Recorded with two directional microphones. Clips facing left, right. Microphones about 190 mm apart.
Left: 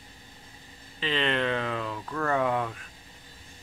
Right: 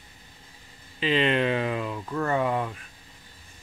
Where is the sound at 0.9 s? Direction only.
15° right (ahead or behind).